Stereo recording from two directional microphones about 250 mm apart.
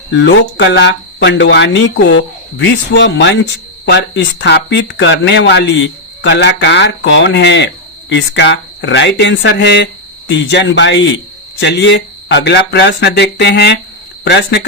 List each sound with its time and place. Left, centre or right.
0.1 s speech: left